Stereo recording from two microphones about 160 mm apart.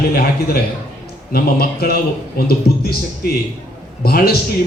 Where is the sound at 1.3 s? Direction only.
75° left (ahead or behind).